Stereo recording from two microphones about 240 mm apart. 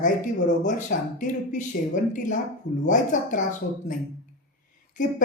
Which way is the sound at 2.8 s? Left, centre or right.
Left.